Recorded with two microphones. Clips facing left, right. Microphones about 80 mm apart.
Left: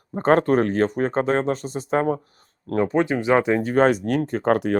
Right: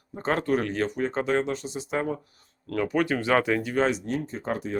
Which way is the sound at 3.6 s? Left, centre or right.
Left.